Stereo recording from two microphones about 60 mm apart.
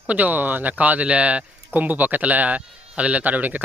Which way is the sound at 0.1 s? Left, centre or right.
Right.